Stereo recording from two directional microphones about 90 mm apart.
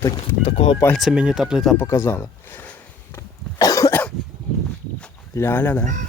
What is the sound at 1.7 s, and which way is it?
Speech, 30° left (ahead or behind).